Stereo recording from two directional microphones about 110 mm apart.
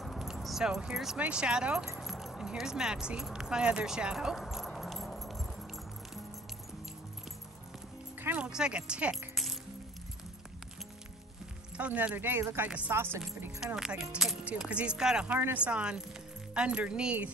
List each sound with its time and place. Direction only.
0.0 s a sound: centre (ahead or behind)
1.2 s speech: 10° right (ahead or behind)
2.0 s keys jangling: centre (ahead or behind)
8.2 s music: 15° right (ahead or behind)
8.5 s speech: 5° right (ahead or behind)
9.3 s music: centre (ahead or behind)
11.7 s speech: 10° right (ahead or behind)
13.7 s speech: 5° right (ahead or behind)